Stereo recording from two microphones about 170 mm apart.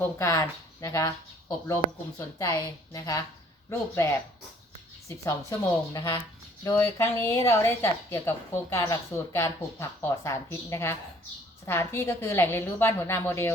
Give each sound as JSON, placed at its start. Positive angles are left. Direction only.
{"t": 0.0, "sound": "speech", "side_deg": 20}